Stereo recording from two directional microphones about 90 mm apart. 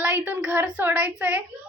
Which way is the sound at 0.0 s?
20° right (ahead or behind).